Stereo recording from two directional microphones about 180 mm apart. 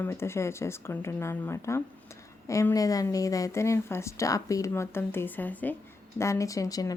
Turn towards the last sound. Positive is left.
turn(degrees=20)  # may be behind; listen again after turning